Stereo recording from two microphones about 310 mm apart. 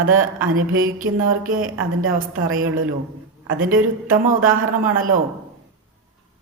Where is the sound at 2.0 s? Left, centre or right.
Right.